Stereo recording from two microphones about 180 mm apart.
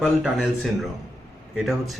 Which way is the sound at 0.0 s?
Centre (ahead or behind).